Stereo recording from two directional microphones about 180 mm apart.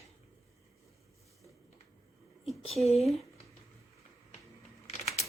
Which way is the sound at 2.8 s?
35° left (ahead or behind).